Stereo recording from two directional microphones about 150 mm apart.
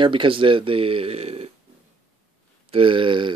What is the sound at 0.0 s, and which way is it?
Speech, 35° right (ahead or behind).